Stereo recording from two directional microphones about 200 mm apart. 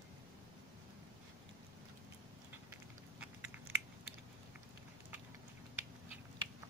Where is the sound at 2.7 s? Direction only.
10° right (ahead or behind).